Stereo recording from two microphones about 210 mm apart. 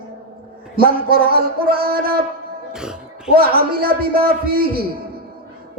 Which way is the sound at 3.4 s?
45° right (ahead or behind).